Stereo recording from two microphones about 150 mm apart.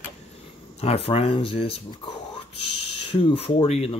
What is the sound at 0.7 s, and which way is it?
Speech, 40° left (ahead or behind).